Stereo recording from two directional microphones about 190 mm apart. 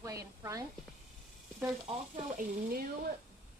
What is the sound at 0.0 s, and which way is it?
Music, 15° right (ahead or behind).